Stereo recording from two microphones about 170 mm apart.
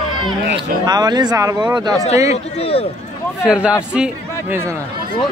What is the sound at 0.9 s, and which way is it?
Speech, 25° right (ahead or behind).